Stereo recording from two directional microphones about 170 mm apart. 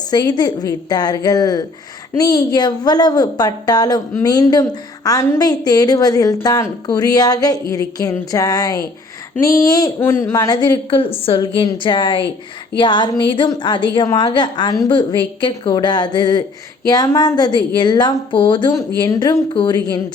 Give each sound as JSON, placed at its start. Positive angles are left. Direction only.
{"t": 0.1, "sound": "a woman's voice", "side_deg": 25}